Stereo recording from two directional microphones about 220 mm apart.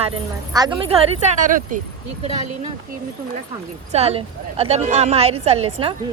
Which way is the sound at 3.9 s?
25° right (ahead or behind).